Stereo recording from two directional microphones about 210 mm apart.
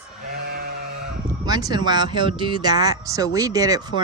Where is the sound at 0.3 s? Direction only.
45° right (ahead or behind).